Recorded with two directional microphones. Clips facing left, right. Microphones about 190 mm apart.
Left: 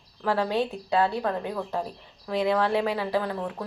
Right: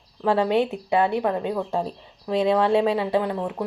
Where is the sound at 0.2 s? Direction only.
20° right (ahead or behind).